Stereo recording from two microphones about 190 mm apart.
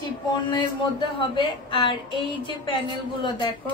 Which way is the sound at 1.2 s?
25° left (ahead or behind).